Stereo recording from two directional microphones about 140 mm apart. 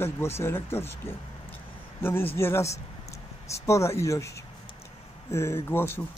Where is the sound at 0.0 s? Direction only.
15° left (ahead or behind).